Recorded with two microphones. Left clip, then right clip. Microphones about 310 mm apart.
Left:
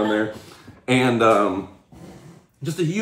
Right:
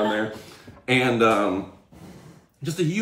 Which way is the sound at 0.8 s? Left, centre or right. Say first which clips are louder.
Left 2 dB; centre.